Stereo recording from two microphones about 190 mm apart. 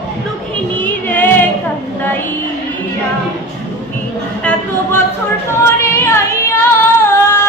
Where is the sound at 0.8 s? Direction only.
10° left (ahead or behind).